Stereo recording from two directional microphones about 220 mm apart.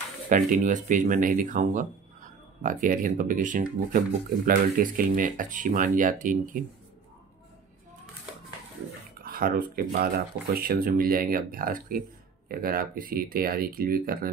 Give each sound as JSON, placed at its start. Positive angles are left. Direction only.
{"t": 0.3, "sound": "speech", "side_deg": -35}
{"t": 9.2, "sound": "speech", "side_deg": -40}